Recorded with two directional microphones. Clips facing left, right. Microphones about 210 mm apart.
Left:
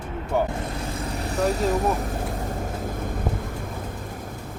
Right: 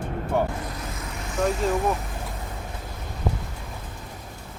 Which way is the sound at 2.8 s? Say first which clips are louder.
Left 8 dB; 50° left (ahead or behind).